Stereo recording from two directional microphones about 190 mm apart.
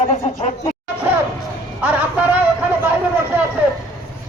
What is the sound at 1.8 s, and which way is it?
Vehicle, 10° right (ahead or behind).